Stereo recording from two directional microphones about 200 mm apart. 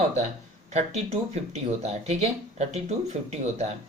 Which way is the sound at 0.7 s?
35° right (ahead or behind).